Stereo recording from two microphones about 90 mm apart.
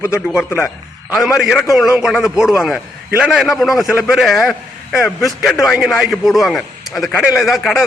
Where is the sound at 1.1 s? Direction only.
5° right (ahead or behind).